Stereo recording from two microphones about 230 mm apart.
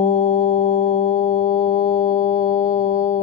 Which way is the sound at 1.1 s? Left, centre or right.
Centre.